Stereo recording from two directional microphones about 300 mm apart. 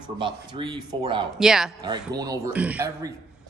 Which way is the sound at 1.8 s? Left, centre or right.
Centre.